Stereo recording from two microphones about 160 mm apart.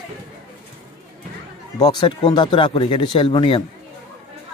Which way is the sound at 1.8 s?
30° left (ahead or behind).